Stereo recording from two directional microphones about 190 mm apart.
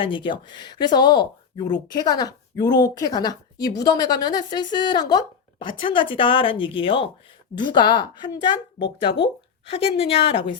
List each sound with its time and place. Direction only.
0.0 s speech: 25° left (ahead or behind)